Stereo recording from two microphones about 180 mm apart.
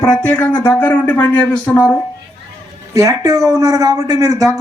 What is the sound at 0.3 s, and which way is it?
Speech, 10° left (ahead or behind).